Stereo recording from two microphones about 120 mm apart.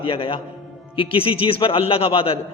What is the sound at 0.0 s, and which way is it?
A man's voice, 50° left (ahead or behind).